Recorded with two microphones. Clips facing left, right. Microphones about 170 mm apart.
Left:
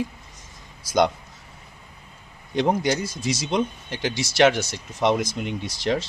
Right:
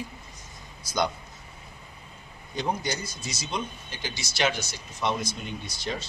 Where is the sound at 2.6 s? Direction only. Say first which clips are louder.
Left 8 dB; 90° left.